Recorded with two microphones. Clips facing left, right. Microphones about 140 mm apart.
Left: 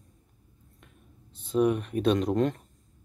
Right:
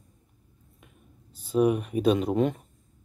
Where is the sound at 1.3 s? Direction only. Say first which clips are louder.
Right 1 dB; 5° right (ahead or behind).